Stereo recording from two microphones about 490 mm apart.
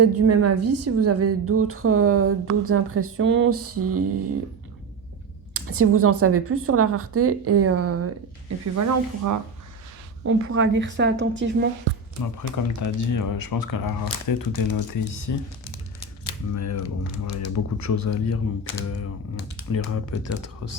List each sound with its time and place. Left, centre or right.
0.0 s a woman's voice: right
5.5 s a woman's voice: right
10.2 s a woman's voice: right
12.4 s speech: left
16.6 s speech: left
19.5 s speech: left